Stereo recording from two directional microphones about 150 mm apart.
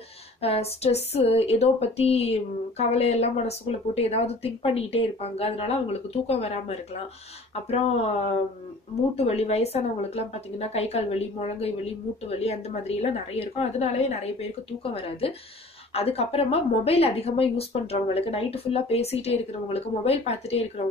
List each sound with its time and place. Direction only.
0.4 s speech: 45° left (ahead or behind)